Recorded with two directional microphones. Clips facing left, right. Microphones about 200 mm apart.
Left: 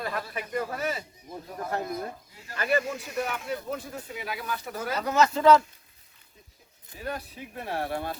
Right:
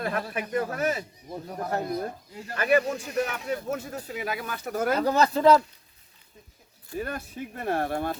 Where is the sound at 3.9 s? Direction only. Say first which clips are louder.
Right 4 dB; 45° right (ahead or behind).